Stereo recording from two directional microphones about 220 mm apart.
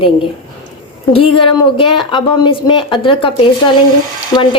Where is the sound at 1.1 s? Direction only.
25° left (ahead or behind).